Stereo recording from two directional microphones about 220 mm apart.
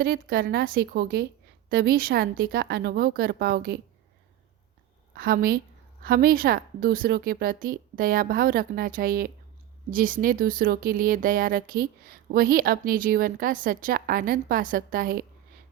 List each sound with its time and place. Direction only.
0.0 s a woman's voice: 40° right (ahead or behind)
5.1 s a woman's voice: 40° right (ahead or behind)